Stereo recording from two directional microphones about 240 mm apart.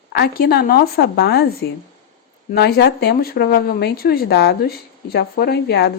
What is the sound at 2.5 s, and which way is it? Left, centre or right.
Speech, left.